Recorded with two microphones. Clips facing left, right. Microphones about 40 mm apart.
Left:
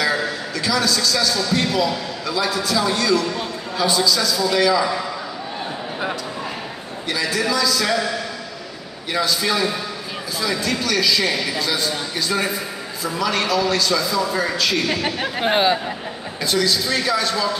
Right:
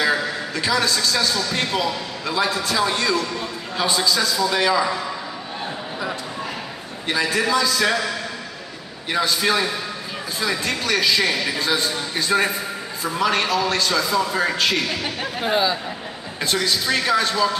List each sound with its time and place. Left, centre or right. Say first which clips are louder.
0.0 s a man's voice: even; right
7.1 s a man's voice: right 1 dB; right
9.1 s a man's voice: right 1 dB; right
15.4 s speech: left 3 dB; left
16.4 s a man's voice: left 1 dB; right